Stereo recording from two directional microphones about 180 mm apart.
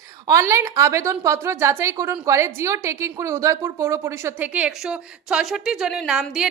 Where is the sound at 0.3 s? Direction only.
15° right (ahead or behind).